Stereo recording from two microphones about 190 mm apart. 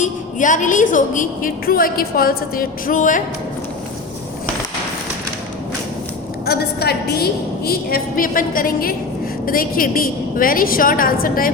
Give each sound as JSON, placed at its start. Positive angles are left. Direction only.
{"t": 0.0, "sound": "a woman's voice", "side_deg": 40}
{"t": 6.4, "sound": "a woman's voice", "side_deg": 55}